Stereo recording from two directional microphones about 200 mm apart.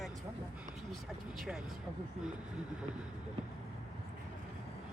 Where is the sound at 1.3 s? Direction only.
5° right (ahead or behind).